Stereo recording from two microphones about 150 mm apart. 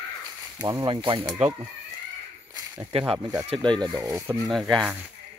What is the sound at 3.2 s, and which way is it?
Speech, 25° right (ahead or behind).